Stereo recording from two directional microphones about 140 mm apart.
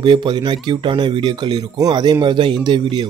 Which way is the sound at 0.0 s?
30° right (ahead or behind).